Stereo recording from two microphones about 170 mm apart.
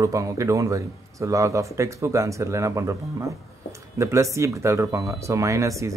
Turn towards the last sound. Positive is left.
turn(degrees=-20)  # may be behind; listen again after turning